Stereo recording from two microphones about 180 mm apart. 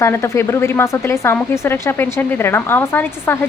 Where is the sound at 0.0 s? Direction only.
15° left (ahead or behind).